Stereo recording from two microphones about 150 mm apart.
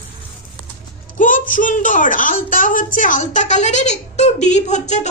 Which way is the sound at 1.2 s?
60° left (ahead or behind).